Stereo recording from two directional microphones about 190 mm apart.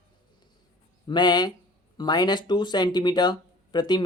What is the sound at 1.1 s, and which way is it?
A man's voice, 20° left (ahead or behind).